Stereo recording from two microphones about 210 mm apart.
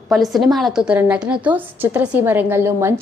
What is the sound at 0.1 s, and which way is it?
A woman's voice, centre (ahead or behind).